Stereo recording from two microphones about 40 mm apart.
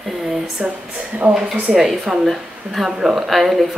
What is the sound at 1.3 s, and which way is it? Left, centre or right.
Speech, centre.